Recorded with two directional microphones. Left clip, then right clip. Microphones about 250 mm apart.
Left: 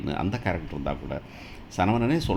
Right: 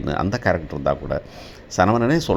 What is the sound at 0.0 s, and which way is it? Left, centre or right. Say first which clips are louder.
Speech: right 8 dB; right.